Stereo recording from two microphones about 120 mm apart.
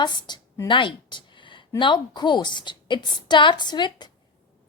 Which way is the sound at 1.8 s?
40° left (ahead or behind).